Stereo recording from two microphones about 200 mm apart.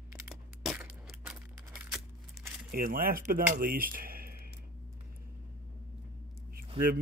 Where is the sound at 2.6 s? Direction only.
45° right (ahead or behind).